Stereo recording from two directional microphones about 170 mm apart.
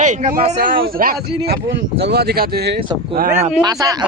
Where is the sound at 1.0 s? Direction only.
55° right (ahead or behind).